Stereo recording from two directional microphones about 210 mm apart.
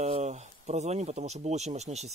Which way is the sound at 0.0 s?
30° right (ahead or behind).